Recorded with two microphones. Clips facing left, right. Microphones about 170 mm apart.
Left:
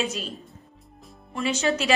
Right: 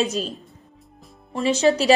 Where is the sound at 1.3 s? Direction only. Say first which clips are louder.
Right 6 dB; 35° right (ahead or behind).